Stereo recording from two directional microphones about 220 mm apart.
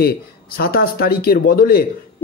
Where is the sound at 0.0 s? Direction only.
45° left (ahead or behind).